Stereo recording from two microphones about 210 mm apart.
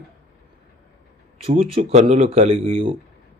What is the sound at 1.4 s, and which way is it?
Speech, 30° right (ahead or behind).